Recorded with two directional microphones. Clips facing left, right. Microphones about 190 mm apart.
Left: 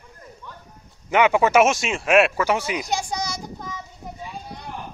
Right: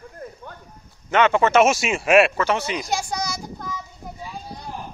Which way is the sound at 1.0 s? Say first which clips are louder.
Even; 10° left (ahead or behind).